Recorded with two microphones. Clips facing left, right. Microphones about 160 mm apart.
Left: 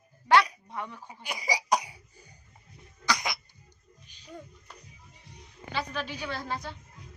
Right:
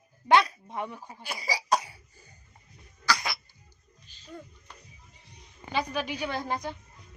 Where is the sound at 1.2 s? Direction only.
15° left (ahead or behind).